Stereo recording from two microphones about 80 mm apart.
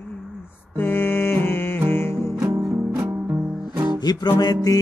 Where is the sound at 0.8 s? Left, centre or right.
Left.